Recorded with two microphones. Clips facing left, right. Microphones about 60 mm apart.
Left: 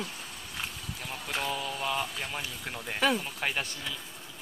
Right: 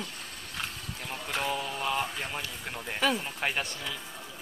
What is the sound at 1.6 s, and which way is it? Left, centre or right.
Mantra, right.